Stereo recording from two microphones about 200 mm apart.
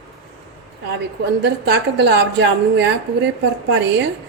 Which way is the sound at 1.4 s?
60° right (ahead or behind).